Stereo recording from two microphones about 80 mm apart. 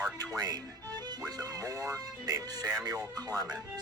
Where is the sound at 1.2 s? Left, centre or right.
Right.